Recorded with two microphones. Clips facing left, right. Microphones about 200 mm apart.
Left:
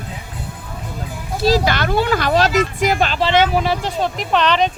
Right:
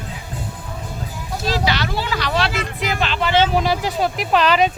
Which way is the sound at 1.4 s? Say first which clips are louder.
Left 6 dB; 45° left (ahead or behind).